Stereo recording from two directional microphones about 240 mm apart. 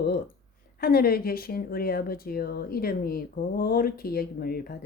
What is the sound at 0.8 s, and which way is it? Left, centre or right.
Speech, left.